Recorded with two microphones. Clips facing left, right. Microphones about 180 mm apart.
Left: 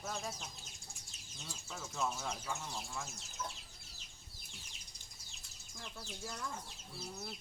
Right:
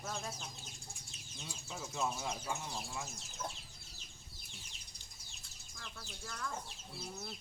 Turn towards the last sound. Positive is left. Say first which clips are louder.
# left 1 dB
turn(degrees=20)  # may be behind; listen again after turning